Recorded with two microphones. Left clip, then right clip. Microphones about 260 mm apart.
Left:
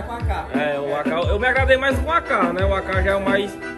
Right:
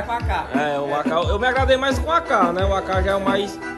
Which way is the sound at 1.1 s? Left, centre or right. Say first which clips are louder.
Left 1 dB; centre.